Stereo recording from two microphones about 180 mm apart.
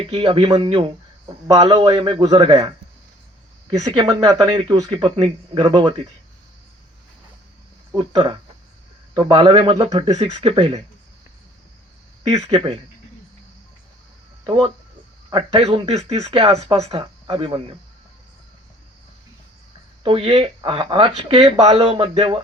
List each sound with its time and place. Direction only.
0.0 s speech: 30° right (ahead or behind)
3.8 s speech: 20° right (ahead or behind)
7.9 s speech: 25° right (ahead or behind)
12.2 s speech: 35° right (ahead or behind)
14.4 s speech: 25° right (ahead or behind)
20.0 s speech: 30° right (ahead or behind)